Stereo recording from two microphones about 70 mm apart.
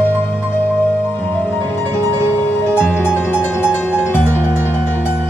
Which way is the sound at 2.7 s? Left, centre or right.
Left.